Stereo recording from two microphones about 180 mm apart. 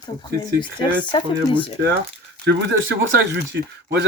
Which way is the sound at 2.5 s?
75° right (ahead or behind).